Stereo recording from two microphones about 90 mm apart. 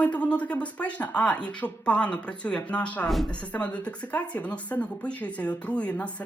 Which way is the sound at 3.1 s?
Centre (ahead or behind).